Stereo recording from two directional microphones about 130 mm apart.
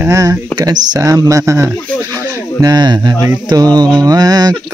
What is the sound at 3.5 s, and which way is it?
Speech, 30° right (ahead or behind).